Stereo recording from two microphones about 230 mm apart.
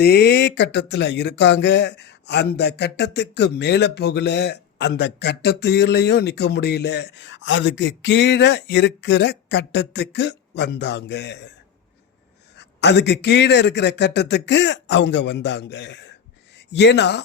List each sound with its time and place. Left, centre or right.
0.0 s speech: left
12.5 s speech: left